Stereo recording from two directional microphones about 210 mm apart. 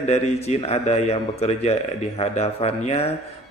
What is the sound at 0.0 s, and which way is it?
A man's voice, 30° left (ahead or behind).